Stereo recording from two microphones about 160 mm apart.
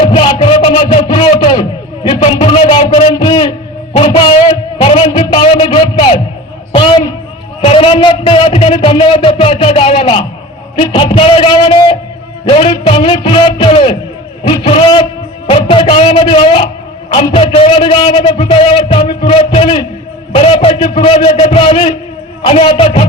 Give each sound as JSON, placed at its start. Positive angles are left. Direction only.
{"t": 0.0, "sound": "a sound", "side_deg": 30}
{"t": 3.9, "sound": "a man's voice", "side_deg": 35}
{"t": 7.6, "sound": "a man's voice", "side_deg": 35}